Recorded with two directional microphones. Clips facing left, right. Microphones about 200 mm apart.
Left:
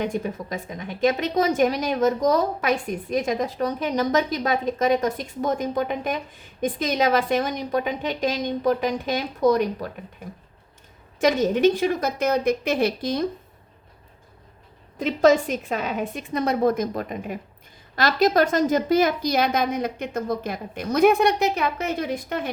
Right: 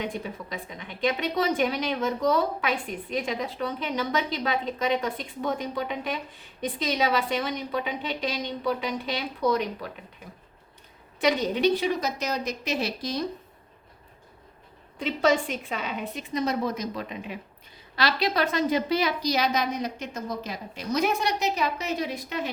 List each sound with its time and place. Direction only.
0.0 s a woman's voice: 45° left (ahead or behind)
11.2 s a woman's voice: 45° left (ahead or behind)
14.9 s a woman's voice: 45° left (ahead or behind)